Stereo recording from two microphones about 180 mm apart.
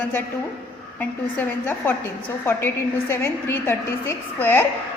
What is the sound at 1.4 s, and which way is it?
A woman's voice, 10° left (ahead or behind).